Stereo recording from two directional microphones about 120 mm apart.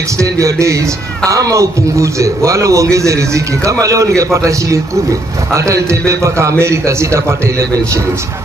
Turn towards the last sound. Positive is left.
turn(degrees=-25)  # may be behind; listen again after turning